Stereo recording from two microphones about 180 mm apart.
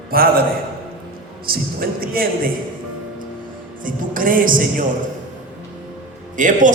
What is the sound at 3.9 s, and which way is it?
Speech, 50° right (ahead or behind).